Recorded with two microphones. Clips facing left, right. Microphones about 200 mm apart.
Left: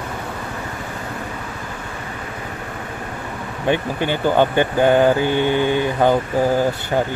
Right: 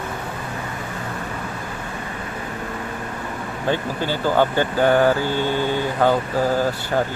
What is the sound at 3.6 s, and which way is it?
Speech, 20° left (ahead or behind).